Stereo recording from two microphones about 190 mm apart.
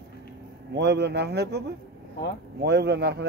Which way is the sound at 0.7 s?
60° right (ahead or behind).